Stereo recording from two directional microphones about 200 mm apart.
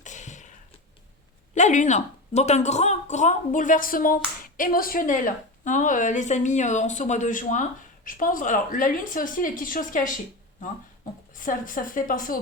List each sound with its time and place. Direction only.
0.0 s a sound: 35° left (ahead or behind)
1.5 s a woman's voice: 35° left (ahead or behind)
11.3 s a woman's voice: 45° left (ahead or behind)